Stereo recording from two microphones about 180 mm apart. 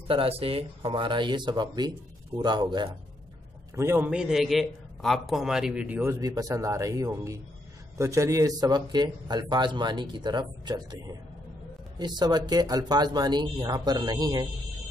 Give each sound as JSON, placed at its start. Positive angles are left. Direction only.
{"t": 0.1, "sound": "a man's voice", "side_deg": -30}
{"t": 3.7, "sound": "a man's voice", "side_deg": -15}